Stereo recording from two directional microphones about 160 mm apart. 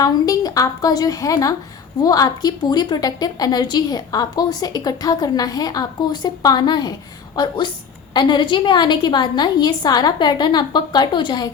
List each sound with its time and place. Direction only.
0.0 s a woman's voice: 20° left (ahead or behind)